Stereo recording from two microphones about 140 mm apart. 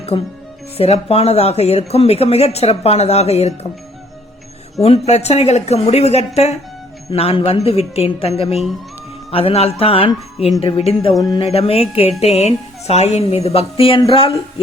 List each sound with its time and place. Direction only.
0.8 s speech: 45° left (ahead or behind)
4.8 s speech: 45° left (ahead or behind)
11.2 s music: 30° left (ahead or behind)
11.4 s speech: 45° left (ahead or behind)